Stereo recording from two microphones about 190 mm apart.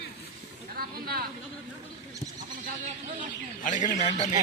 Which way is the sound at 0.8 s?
55° right (ahead or behind).